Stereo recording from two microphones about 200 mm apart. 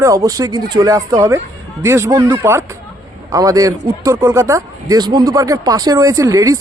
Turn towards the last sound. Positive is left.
turn(degrees=-15)  # may be behind; listen again after turning